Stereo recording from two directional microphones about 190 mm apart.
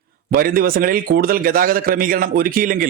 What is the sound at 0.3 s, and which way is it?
A man's voice, 50° right (ahead or behind).